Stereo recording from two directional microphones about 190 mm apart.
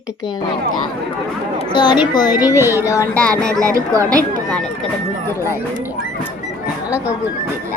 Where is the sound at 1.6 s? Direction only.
25° left (ahead or behind).